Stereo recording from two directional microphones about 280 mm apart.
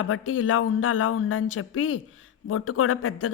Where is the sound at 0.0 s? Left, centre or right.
Left.